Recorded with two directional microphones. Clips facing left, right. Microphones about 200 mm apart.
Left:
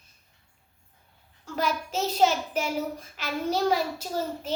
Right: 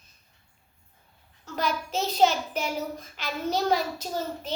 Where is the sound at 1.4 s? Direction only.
10° left (ahead or behind).